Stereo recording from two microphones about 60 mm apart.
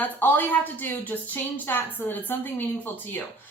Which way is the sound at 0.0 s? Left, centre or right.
Left.